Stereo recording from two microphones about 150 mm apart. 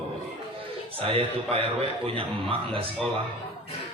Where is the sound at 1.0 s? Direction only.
40° right (ahead or behind).